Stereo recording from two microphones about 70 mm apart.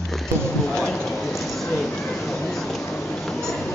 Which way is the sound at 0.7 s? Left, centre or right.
Centre.